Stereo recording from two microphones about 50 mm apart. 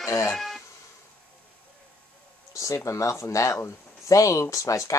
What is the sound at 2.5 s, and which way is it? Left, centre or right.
Speech, left.